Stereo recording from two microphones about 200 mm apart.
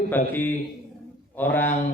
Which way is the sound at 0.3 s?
10° left (ahead or behind).